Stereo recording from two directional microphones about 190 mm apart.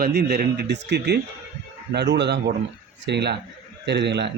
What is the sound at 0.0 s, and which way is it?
Speech, 60° right (ahead or behind).